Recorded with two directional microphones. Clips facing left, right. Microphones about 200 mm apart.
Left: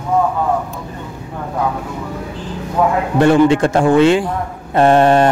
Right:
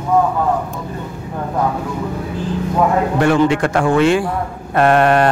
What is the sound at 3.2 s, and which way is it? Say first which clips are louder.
A man's voice: left 5 dB; 25° left (ahead or behind).